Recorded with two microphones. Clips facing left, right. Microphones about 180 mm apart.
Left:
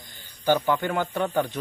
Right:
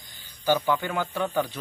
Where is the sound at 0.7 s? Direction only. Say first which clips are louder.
Left 3 dB; centre (ahead or behind).